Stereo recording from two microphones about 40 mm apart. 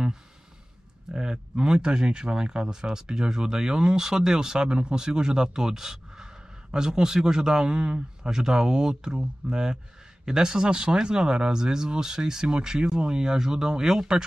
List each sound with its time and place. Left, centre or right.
1.1 s speech: centre